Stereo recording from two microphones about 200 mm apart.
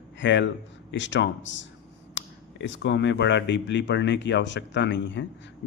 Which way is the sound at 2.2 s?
65° left (ahead or behind).